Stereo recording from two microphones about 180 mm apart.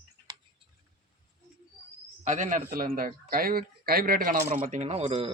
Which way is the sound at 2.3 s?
40° right (ahead or behind).